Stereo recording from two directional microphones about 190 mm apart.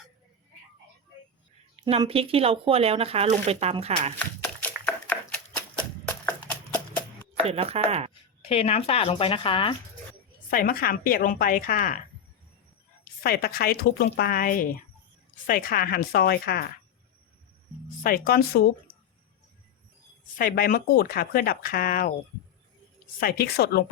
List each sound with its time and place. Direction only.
1.7 s speech: 25° right (ahead or behind)
4.6 s a sound: 5° left (ahead or behind)
7.4 s speech: 30° right (ahead or behind)
8.4 s speech: 30° left (ahead or behind)
10.5 s speech: 50° left (ahead or behind)
13.2 s speech: 55° left (ahead or behind)
18.0 s speech: 50° left (ahead or behind)
20.4 s speech: 50° left (ahead or behind)
23.2 s a woman's voice: 55° left (ahead or behind)